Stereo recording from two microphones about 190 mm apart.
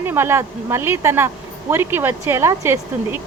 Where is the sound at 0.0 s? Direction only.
10° right (ahead or behind).